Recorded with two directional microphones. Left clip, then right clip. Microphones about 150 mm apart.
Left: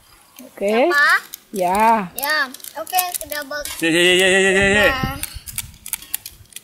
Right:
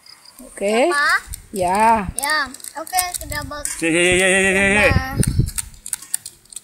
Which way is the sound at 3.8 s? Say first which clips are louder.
Left 1 dB; 30° right (ahead or behind).